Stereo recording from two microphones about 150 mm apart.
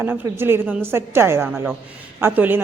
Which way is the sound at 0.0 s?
15° right (ahead or behind).